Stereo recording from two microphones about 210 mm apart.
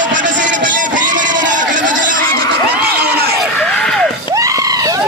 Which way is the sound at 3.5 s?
5° left (ahead or behind).